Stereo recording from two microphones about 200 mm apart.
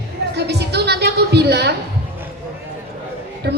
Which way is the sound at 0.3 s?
55° right (ahead or behind).